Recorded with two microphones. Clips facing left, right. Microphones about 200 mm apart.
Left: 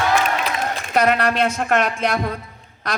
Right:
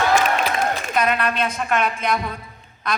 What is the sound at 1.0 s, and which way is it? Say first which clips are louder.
A woman's voice: left 5 dB; 75° left (ahead or behind).